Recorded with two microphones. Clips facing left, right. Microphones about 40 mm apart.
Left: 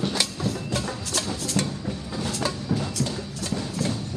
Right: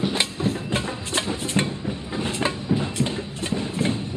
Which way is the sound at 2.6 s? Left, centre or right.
Right.